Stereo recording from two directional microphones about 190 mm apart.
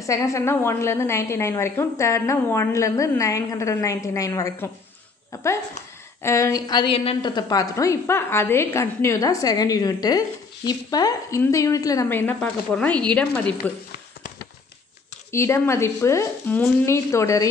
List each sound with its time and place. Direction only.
0.0 s a woman's voice: 15° left (ahead or behind)
15.3 s a woman's voice: 15° left (ahead or behind)